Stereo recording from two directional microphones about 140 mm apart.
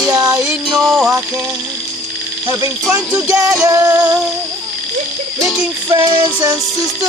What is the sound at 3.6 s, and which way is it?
Music, 20° right (ahead or behind).